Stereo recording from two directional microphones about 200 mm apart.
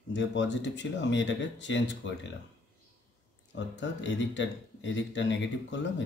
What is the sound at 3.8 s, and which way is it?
Speech, 65° left (ahead or behind).